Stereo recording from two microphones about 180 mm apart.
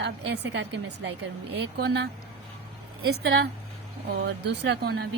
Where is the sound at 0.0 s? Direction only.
70° right (ahead or behind).